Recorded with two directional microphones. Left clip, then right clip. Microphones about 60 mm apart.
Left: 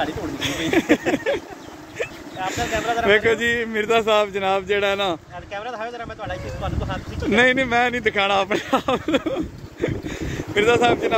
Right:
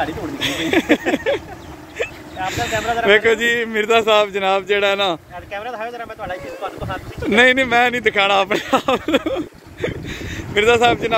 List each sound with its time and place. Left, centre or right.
0.4 s speech: centre
2.0 s vehicle: centre
2.6 s speech: centre
7.2 s speech: right